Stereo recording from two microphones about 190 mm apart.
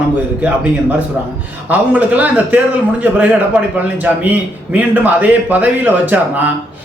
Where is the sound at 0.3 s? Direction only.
10° right (ahead or behind).